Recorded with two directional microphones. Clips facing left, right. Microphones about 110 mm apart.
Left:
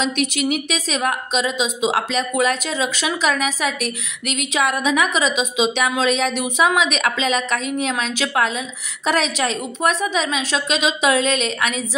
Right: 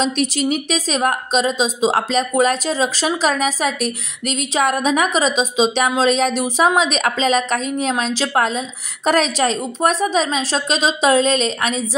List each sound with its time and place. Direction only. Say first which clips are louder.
0.0 s a woman's voice: right 2 dB; 35° right (ahead or behind)